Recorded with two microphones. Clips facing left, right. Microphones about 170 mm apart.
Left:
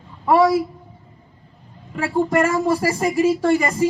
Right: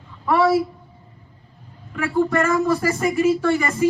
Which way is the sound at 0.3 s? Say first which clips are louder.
Left 3 dB; 30° left (ahead or behind).